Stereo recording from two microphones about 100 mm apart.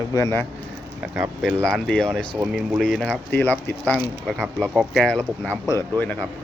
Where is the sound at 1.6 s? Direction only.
5° left (ahead or behind).